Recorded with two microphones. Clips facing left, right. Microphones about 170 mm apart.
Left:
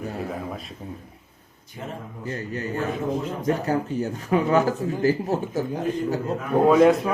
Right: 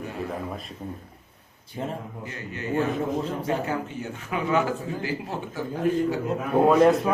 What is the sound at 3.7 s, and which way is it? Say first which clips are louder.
Speech: left 6 dB; 40° left (ahead or behind).